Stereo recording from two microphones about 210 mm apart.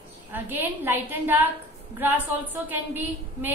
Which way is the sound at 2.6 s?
10° right (ahead or behind).